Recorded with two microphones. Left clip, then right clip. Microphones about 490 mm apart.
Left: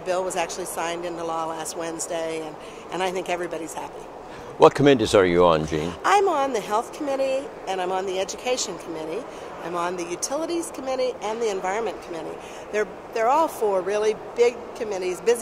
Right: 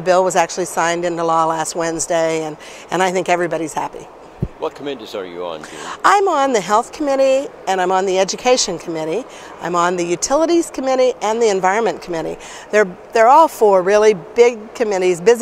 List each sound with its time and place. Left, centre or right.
0.0 s speech: right
4.6 s speech: left
5.8 s speech: right